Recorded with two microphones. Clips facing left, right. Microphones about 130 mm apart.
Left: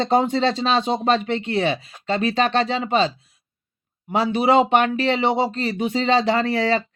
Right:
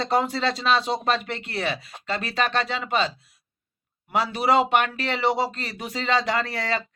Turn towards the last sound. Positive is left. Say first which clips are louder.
# left 7 dB
turn(degrees=30)  # may be behind; listen again after turning